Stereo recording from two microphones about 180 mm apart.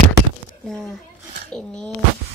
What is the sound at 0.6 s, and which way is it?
A woman's voice, 5° left (ahead or behind).